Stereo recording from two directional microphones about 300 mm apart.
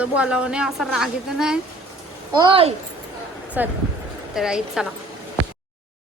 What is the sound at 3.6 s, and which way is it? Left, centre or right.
A woman's voice, centre.